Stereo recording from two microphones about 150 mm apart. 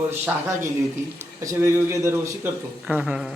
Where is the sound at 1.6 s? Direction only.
20° right (ahead or behind).